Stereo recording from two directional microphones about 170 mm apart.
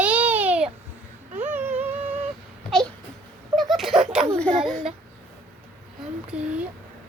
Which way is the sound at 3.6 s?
Centre (ahead or behind).